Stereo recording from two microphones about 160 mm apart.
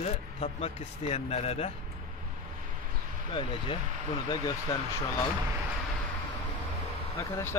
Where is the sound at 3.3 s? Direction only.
35° left (ahead or behind).